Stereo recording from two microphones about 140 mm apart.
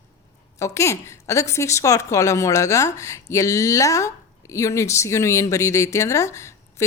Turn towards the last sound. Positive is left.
turn(degrees=20)  # may be behind; listen again after turning